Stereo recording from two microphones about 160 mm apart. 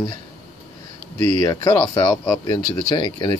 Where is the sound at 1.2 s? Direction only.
25° left (ahead or behind).